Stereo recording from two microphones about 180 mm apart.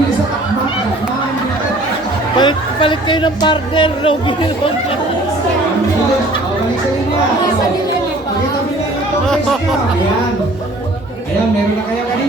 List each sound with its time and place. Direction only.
2.4 s a woman's voice: 25° left (ahead or behind)
9.2 s speech: centre (ahead or behind)